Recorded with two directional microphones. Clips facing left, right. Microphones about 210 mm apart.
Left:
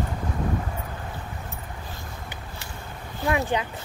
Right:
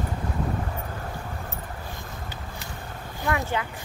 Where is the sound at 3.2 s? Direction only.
15° left (ahead or behind).